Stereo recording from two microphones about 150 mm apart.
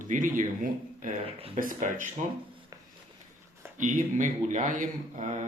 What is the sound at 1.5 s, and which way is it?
Speech, 60° right (ahead or behind).